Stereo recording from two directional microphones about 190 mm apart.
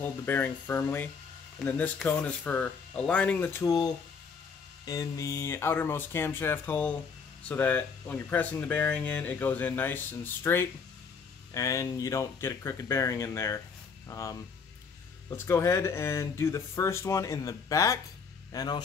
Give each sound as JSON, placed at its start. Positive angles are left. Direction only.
{"t": 0.0, "sound": "speech", "side_deg": 10}